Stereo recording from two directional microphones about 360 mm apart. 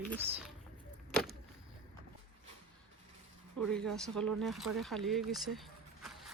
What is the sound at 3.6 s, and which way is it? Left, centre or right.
Speech, centre.